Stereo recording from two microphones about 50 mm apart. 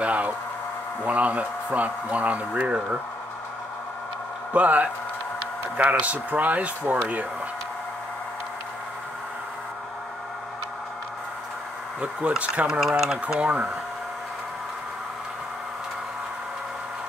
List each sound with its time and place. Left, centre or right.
0.0 s a sound: right
1.0 s speech: right
4.5 s speech: right
12.0 s speech: right
12.8 s speech: centre